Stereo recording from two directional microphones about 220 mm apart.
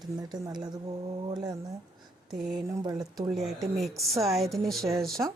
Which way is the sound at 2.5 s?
15° right (ahead or behind).